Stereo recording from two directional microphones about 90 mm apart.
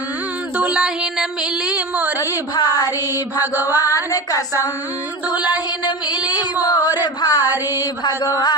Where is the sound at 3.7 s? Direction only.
40° left (ahead or behind).